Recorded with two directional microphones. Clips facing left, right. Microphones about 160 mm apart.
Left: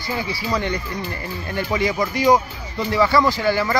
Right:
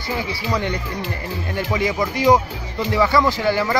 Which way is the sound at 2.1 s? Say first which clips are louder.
Right 1 dB; 15° right (ahead or behind).